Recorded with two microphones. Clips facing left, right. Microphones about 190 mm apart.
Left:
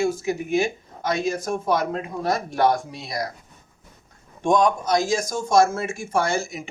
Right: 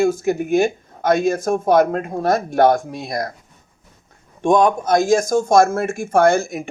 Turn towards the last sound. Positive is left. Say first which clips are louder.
# right 9 dB
turn(degrees=-50)  # may be behind; listen again after turning